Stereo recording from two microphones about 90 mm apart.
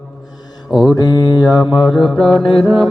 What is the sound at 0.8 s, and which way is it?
Mantra, 45° left (ahead or behind).